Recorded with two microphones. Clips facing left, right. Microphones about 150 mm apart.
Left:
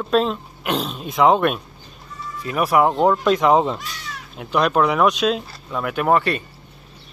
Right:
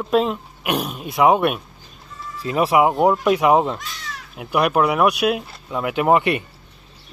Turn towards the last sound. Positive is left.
turn(degrees=-15)  # may be behind; listen again after turning